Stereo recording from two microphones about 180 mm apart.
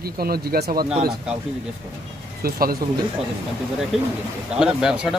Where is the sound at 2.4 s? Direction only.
55° right (ahead or behind).